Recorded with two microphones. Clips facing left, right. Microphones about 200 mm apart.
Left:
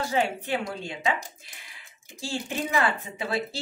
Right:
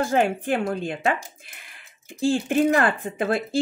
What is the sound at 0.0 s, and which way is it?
Speech, 50° right (ahead or behind).